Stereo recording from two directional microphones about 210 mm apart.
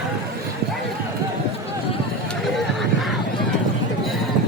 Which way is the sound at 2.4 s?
Centre (ahead or behind).